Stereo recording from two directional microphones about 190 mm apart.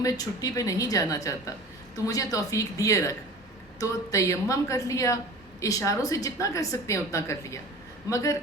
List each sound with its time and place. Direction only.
0.0 s a woman's voice: 15° left (ahead or behind)